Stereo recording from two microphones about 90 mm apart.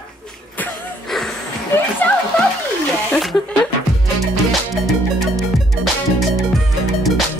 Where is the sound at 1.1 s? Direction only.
5° left (ahead or behind).